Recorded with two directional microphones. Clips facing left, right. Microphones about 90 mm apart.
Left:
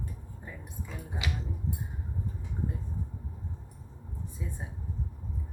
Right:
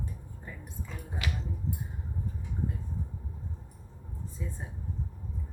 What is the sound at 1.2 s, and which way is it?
Speech, 20° left (ahead or behind).